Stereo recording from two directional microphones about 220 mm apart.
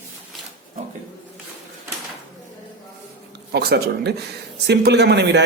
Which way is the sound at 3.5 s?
45° right (ahead or behind).